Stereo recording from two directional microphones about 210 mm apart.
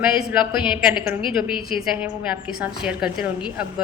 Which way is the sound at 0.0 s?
5° right (ahead or behind).